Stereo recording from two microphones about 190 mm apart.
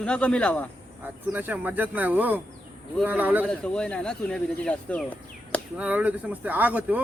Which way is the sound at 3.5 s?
5° left (ahead or behind).